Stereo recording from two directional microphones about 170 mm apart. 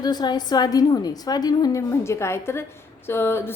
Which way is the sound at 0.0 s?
25° left (ahead or behind).